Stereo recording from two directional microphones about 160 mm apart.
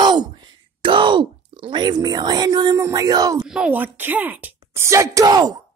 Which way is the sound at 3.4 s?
5° right (ahead or behind).